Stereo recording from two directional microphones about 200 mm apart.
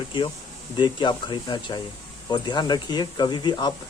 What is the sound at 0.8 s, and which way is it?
Speech, 25° left (ahead or behind).